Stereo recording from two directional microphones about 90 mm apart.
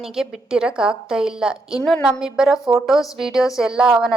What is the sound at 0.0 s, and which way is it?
A woman's voice, 5° right (ahead or behind).